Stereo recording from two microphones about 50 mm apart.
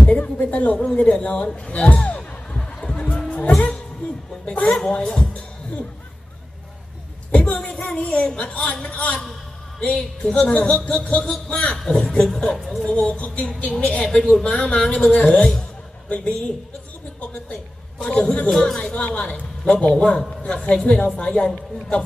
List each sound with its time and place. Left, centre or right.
0.0 s music: left
0.9 s a man's voice: left
2.0 s music: left
4.0 s a sound: left
4.7 s a sound: centre
7.2 s a sound: left
7.7 s a man's voice: left
12.5 s a woman's voice: centre
13.0 s a man's voice: centre
18.0 s a man's voice: centre
20.2 s a man's voice: centre
20.9 s speech: left
21.2 s a man's voice: centre